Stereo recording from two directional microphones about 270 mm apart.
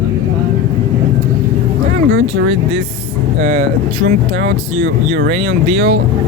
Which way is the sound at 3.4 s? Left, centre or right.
Right.